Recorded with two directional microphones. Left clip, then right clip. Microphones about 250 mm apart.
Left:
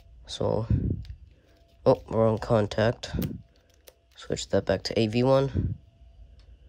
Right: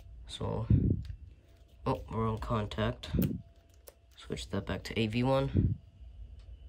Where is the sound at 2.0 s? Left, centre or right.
Centre.